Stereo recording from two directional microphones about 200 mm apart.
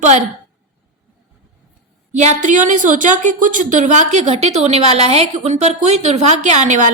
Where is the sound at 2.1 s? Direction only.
40° right (ahead or behind).